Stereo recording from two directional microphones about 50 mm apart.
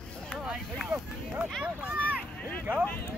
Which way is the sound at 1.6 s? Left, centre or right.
Right.